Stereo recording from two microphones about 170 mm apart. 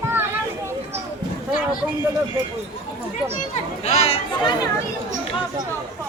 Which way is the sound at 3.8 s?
40° left (ahead or behind).